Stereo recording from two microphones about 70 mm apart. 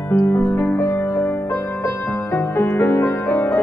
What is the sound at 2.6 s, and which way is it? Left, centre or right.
Music, left.